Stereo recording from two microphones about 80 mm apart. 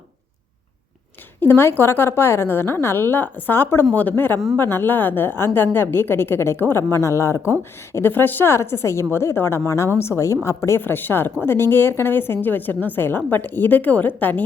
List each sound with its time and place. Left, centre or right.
1.4 s a woman's voice: left
7.9 s a woman's voice: left